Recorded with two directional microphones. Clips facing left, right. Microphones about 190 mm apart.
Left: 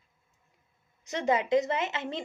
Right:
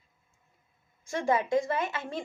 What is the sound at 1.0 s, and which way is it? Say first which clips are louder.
A woman's voice: even; 20° left (ahead or behind).